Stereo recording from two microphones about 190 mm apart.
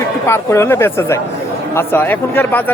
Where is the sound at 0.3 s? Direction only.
15° left (ahead or behind).